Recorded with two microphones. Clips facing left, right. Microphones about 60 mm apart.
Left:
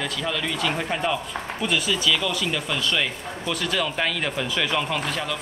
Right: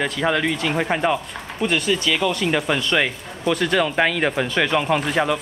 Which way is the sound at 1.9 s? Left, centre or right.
Right.